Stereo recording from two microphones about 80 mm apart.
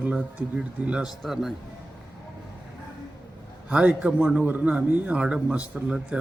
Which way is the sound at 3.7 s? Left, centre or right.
Centre.